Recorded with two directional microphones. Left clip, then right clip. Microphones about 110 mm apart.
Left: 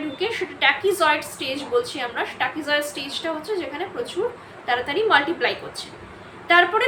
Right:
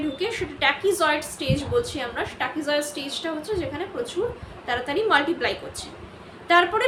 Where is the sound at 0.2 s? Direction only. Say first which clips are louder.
Left 5 dB; 35° right (ahead or behind).